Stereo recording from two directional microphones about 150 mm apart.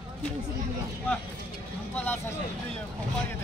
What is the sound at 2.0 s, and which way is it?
Speech, 15° left (ahead or behind).